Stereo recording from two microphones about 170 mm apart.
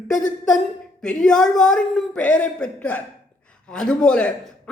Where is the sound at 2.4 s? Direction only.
5° left (ahead or behind).